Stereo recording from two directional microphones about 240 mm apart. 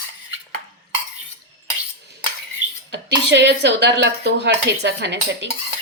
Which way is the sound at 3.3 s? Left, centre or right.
Right.